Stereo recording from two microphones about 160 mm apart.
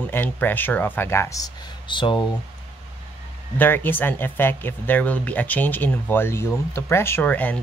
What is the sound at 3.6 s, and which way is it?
Speech, 10° left (ahead or behind).